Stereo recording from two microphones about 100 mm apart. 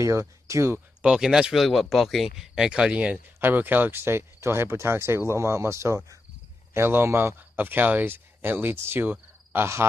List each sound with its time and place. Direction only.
0.0 s speech: 30° right (ahead or behind)
1.0 s speech: 5° right (ahead or behind); by 9.8 s 25° right (ahead or behind)